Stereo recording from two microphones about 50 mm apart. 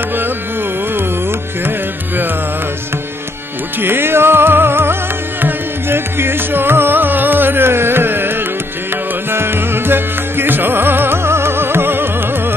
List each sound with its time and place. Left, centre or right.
3.8 s music: right
9.3 s music: right